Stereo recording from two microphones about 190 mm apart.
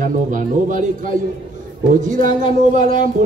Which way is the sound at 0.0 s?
45° right (ahead or behind).